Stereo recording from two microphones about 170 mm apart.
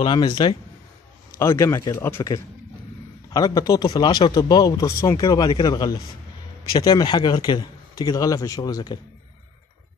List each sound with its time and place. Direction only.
0.0 s a man's voice: 25° left (ahead or behind)
1.4 s a man's voice: 15° left (ahead or behind)